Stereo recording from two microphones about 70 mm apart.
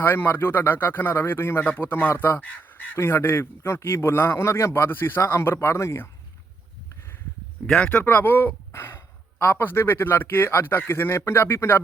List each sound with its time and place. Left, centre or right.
0.0 s speech: left
7.6 s a sound: centre
8.0 s speech: left